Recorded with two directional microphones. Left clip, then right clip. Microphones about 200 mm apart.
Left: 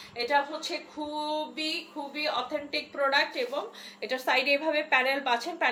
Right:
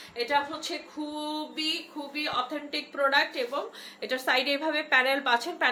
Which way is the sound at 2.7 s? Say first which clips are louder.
Right 1 dB; 15° right (ahead or behind).